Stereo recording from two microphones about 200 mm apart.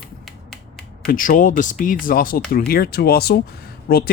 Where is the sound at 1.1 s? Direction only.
40° left (ahead or behind).